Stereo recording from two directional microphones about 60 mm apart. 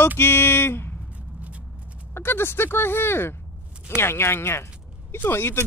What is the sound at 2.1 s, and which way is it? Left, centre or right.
Speech, left.